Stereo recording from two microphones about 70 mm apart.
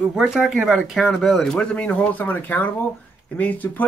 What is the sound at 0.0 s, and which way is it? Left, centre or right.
Speech, centre.